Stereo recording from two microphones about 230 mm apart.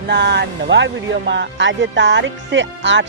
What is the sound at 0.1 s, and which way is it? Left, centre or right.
Speech, right.